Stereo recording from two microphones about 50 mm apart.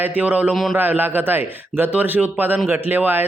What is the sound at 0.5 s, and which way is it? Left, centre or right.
Speech, centre.